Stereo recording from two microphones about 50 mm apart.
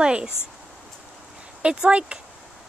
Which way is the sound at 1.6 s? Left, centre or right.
Centre.